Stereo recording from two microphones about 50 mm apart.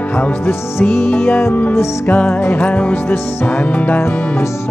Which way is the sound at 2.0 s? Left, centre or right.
Left.